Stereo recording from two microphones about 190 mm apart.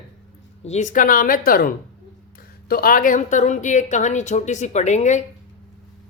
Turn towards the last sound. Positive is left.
turn(degrees=40)  # may be behind; listen again after turning